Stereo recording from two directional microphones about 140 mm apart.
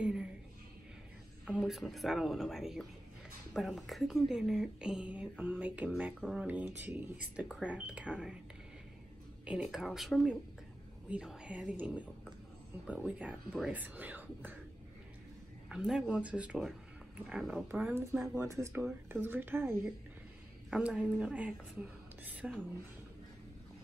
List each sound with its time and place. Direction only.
0.0 s a sound: 5° right (ahead or behind)
1.4 s speech: 5° right (ahead or behind)
9.4 s speech: 5° right (ahead or behind)
15.7 s speech: 5° right (ahead or behind)
20.7 s a woman's voice: 5° right (ahead or behind)